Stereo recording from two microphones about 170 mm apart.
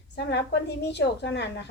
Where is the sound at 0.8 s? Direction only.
85° left.